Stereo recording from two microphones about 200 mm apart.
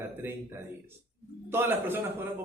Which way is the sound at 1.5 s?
10° right (ahead or behind).